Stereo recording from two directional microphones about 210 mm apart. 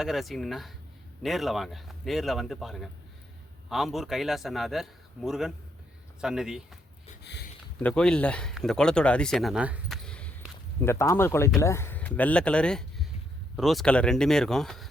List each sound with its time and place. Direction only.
0.0 s speech: centre (ahead or behind)
7.3 s speech: 50° left (ahead or behind)
7.8 s speech: 5° left (ahead or behind)
10.1 s a sound: 5° left (ahead or behind)
11.6 s speech: 10° left (ahead or behind)